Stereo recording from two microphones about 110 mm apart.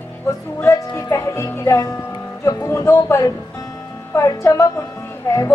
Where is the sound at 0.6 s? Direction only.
25° left (ahead or behind).